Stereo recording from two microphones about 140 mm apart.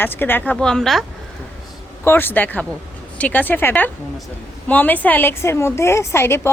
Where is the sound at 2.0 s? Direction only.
15° left (ahead or behind).